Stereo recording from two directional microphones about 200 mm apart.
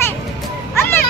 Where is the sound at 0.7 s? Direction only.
10° left (ahead or behind).